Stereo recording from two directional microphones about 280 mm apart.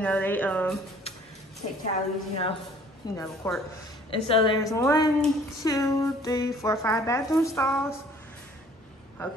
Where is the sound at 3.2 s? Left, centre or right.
Centre.